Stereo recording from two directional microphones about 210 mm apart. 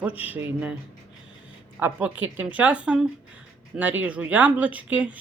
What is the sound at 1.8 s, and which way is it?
Speech, 10° right (ahead or behind).